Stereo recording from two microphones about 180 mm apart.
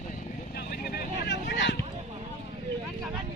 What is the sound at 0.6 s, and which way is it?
Vehicle, 60° left (ahead or behind).